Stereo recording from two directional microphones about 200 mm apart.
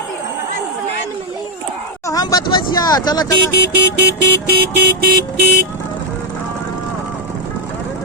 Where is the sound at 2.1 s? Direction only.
20° left (ahead or behind).